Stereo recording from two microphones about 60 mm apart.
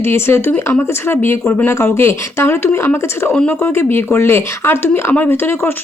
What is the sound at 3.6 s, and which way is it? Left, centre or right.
A woman's voice, left.